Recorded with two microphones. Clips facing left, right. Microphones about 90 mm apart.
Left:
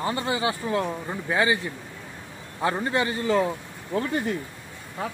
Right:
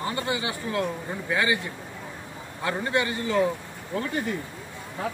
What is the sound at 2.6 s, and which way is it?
Speech, 30° left (ahead or behind).